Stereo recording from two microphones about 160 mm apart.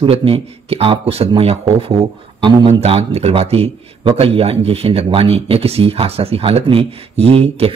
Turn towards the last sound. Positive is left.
turn(degrees=-40)  # may be behind; listen again after turning